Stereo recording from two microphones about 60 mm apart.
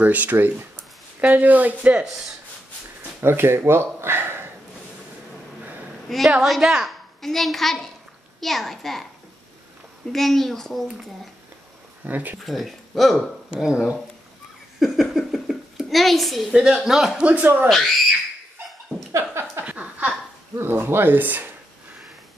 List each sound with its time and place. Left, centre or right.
0.0 s speech: right
3.2 s speech: right
6.0 s a woman's voice: centre
7.2 s speech: centre
10.1 s speech: centre
12.1 s speech: right
12.4 s speech: centre
13.6 s speech: centre
17.2 s speech: right
17.6 s speech: centre
19.6 s a sound: right
20.5 s speech: right